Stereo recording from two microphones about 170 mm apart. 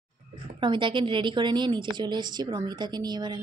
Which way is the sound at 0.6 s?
30° right (ahead or behind).